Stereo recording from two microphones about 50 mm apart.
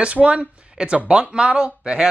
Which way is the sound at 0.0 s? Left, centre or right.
Right.